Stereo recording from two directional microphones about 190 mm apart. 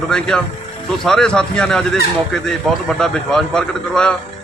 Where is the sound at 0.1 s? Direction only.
5° left (ahead or behind).